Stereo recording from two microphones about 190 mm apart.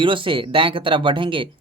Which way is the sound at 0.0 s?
25° right (ahead or behind).